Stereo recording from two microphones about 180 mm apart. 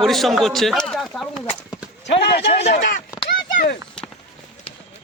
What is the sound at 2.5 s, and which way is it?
Speech, 40° left (ahead or behind).